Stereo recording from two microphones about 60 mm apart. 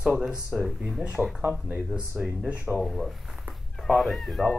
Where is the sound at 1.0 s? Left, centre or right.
Centre.